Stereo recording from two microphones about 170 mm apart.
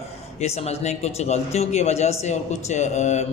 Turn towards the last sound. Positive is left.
turn(degrees=40)  # may be behind; listen again after turning